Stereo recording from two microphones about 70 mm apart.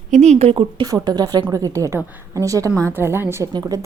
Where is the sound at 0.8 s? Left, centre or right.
Right.